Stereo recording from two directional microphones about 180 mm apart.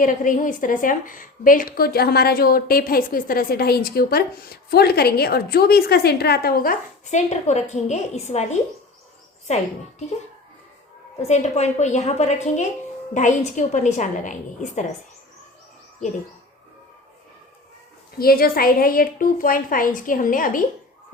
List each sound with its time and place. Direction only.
0.0 s a woman's voice: 45° left (ahead or behind)
11.2 s a woman's voice: 40° left (ahead or behind)
18.2 s a woman's voice: 55° left (ahead or behind)